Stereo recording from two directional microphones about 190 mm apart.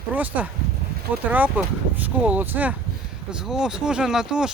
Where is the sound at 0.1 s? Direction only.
10° right (ahead or behind).